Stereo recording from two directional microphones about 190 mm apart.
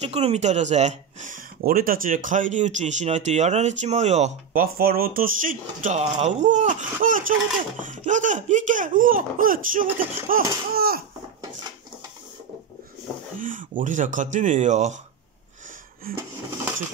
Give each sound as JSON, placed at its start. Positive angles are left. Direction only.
{"t": 0.0, "sound": "speech", "side_deg": -35}
{"t": 4.7, "sound": "speech", "side_deg": -50}
{"t": 13.4, "sound": "speech", "side_deg": -45}
{"t": 16.1, "sound": "speech", "side_deg": -45}